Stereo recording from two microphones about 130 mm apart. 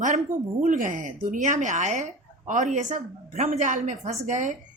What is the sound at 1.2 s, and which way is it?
A woman's voice, 90° right.